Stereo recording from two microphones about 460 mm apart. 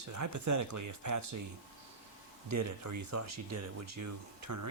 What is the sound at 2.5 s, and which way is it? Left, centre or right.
Speech, right.